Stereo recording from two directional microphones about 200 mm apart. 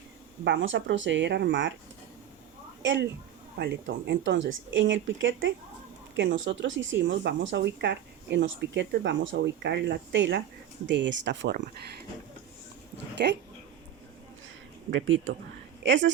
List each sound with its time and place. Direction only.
0.4 s speech: 70° right (ahead or behind)
2.8 s speech: 65° right (ahead or behind)
15.0 s speech: 75° right (ahead or behind)